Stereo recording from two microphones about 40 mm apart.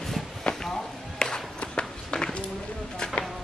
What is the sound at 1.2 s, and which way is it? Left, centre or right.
Music, centre.